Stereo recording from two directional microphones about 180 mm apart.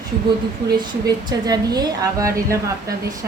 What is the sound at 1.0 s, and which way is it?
A woman's voice, 20° right (ahead or behind).